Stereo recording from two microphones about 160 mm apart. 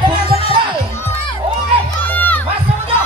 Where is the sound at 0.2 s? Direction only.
40° left (ahead or behind).